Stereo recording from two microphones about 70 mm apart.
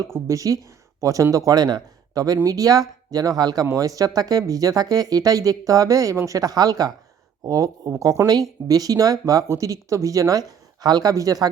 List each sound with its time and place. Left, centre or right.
0.1 s speech: right